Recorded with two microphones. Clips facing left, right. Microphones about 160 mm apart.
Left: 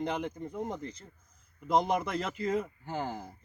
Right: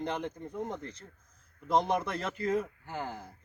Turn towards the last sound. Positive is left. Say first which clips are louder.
# left 3 dB
turn(degrees=15)  # may be behind; listen again after turning